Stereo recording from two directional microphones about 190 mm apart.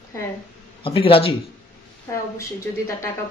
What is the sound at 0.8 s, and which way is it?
Speech, 30° left (ahead or behind).